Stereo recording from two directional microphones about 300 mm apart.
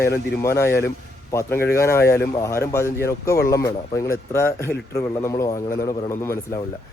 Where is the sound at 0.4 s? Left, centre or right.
Centre.